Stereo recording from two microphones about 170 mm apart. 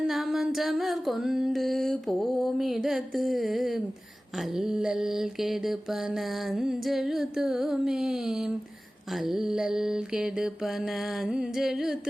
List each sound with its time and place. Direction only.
0.1 s music: centre (ahead or behind)